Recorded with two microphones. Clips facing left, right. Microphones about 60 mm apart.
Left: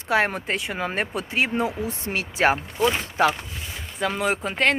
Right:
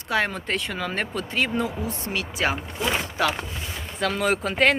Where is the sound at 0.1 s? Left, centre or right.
Left.